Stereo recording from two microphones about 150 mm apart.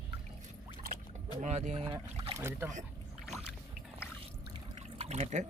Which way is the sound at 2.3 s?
15° right (ahead or behind).